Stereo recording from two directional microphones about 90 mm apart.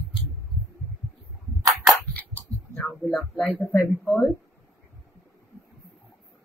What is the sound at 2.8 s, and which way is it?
Speech, 10° left (ahead or behind).